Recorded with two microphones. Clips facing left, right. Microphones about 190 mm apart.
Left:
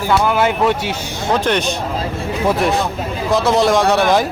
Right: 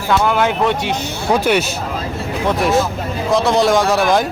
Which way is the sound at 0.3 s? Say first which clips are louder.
Left 1 dB; 5° left (ahead or behind).